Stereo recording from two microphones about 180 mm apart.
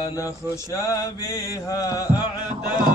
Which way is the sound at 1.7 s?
20° left (ahead or behind).